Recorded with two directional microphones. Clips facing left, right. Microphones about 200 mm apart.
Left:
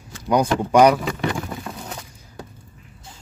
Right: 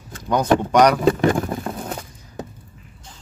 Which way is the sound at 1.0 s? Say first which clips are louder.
Right 8 dB; 50° right (ahead or behind).